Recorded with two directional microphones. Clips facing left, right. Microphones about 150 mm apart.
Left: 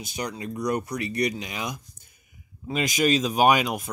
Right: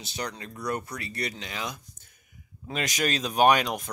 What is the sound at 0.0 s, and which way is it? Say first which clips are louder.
Speech: left 4 dB; 10° left (ahead or behind).